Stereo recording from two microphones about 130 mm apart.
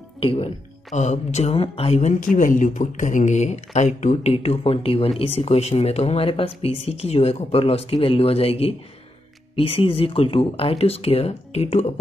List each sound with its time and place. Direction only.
0.2 s speech: 45° left (ahead or behind)
0.9 s speech: 60° left (ahead or behind)
2.1 s speech: 90° left; by 11.9 s 50° left (ahead or behind)